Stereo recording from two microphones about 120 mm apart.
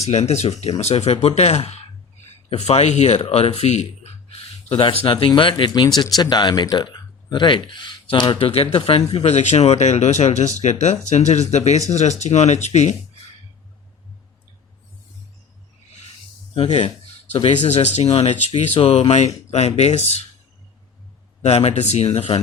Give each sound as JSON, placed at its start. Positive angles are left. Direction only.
{"t": 0.0, "sound": "speech", "side_deg": 65}
{"t": 6.9, "sound": "a sound", "side_deg": 35}
{"t": 7.7, "sound": "speech", "side_deg": 40}
{"t": 9.2, "sound": "speech", "side_deg": 65}
{"t": 16.6, "sound": "speech", "side_deg": 55}
{"t": 21.4, "sound": "speech", "side_deg": 65}